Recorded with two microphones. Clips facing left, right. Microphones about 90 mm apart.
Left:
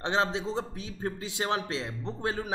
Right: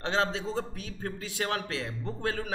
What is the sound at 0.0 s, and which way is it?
A man's voice, 20° left (ahead or behind).